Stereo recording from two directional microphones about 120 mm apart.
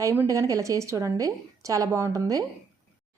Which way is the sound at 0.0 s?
25° right (ahead or behind).